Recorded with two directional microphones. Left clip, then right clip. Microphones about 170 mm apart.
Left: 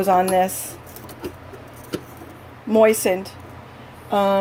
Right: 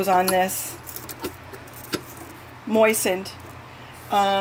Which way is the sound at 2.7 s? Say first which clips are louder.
Left 3 dB; 5° left (ahead or behind).